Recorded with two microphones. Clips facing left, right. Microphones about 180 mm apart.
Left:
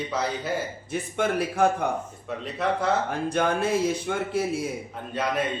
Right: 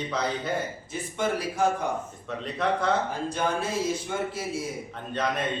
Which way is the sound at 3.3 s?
60° left (ahead or behind).